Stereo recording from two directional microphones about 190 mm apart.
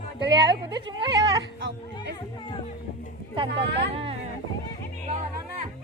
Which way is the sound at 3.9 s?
30° right (ahead or behind).